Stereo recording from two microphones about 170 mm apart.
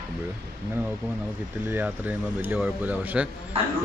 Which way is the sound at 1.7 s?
10° right (ahead or behind).